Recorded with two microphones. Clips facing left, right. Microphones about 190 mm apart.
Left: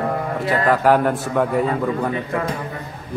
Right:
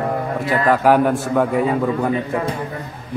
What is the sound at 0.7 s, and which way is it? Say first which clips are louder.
A man's voice: right 2 dB; centre (ahead or behind).